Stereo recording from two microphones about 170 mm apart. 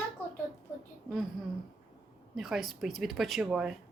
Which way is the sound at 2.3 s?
Centre (ahead or behind).